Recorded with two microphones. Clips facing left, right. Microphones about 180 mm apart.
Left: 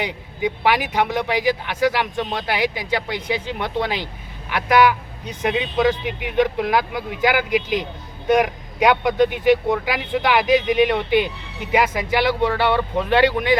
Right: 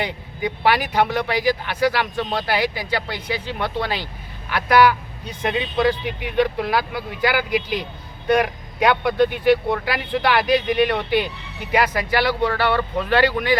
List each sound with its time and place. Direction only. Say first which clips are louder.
0.6 s speech: right 2 dB; 15° left (ahead or behind)
5.4 s speech: left 1 dB; 5° left (ahead or behind)